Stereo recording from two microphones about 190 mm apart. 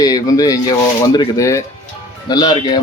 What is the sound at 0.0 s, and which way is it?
Speech, 20° left (ahead or behind).